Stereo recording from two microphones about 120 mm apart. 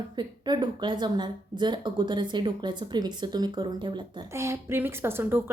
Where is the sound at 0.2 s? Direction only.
40° right (ahead or behind).